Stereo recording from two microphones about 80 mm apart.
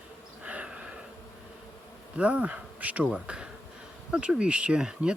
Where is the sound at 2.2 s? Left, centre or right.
Centre.